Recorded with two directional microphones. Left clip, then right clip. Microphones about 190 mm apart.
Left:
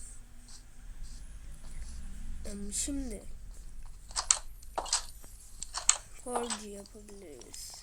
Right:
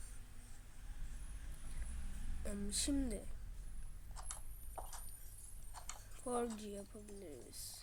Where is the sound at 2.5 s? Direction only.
10° right (ahead or behind).